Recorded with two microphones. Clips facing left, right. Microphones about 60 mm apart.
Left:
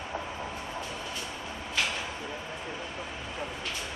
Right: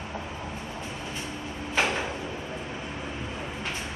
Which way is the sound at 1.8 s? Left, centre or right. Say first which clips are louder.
Right 5 dB; right.